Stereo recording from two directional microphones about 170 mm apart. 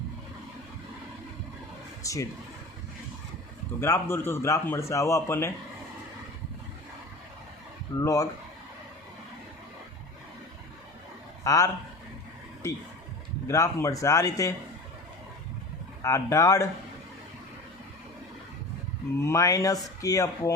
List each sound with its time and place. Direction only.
2.0 s speech: 20° left (ahead or behind)
3.8 s speech: 15° left (ahead or behind)
7.9 s speech: 20° left (ahead or behind)
11.4 s speech: 20° left (ahead or behind)
13.5 s speech: 15° left (ahead or behind)
16.0 s speech: 20° left (ahead or behind)
19.2 s speech: 20° left (ahead or behind)